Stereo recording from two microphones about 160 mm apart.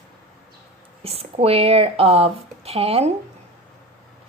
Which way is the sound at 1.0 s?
40° right (ahead or behind).